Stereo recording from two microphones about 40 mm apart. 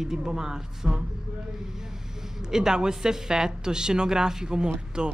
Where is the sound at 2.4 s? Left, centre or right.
Centre.